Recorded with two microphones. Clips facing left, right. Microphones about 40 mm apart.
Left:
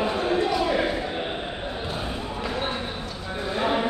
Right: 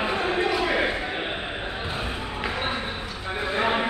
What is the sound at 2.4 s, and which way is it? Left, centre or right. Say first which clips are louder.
Basketball bounce: right 1 dB; right.